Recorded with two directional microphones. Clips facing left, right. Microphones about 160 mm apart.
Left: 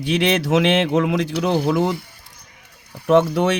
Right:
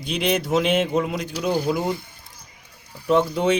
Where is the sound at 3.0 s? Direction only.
70° left (ahead or behind).